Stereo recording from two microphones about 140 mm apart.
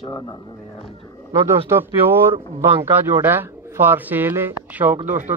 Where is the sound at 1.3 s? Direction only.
20° right (ahead or behind).